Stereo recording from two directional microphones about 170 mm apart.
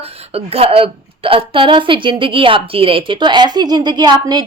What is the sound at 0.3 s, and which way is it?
A woman's voice, 35° right (ahead or behind).